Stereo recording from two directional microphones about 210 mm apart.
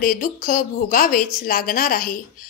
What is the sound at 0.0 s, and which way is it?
A woman's voice, 40° left (ahead or behind).